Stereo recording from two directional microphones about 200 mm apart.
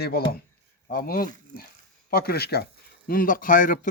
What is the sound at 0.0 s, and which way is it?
Speech, 50° left (ahead or behind).